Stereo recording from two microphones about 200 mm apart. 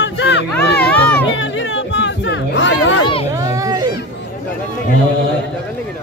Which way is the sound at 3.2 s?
15° right (ahead or behind).